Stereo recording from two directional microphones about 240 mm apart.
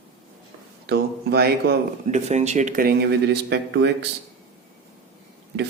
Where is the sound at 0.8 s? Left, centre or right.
Right.